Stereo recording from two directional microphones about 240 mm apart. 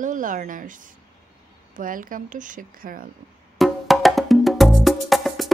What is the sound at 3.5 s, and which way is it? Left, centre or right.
Music, centre.